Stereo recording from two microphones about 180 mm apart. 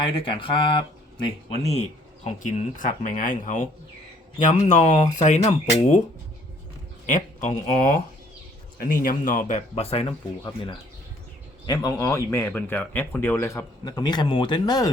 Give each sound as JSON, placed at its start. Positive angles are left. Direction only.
{"t": 0.0, "sound": "speech", "side_deg": 30}
{"t": 7.1, "sound": "speech", "side_deg": 45}